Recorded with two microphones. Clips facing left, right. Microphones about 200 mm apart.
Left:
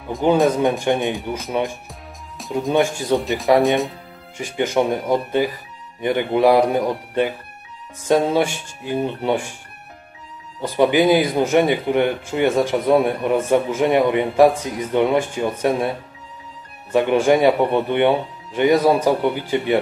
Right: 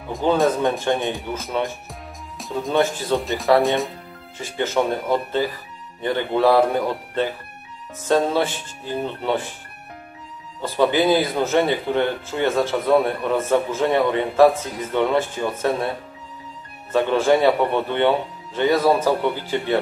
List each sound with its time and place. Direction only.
0.5 s speech: 15° left (ahead or behind)
1.9 s music: centre (ahead or behind)
2.7 s speech: 15° left (ahead or behind)
3.2 s speech: centre (ahead or behind)
3.4 s speech: 15° left (ahead or behind)
10.6 s speech: 15° left (ahead or behind)
16.9 s speech: 15° left (ahead or behind)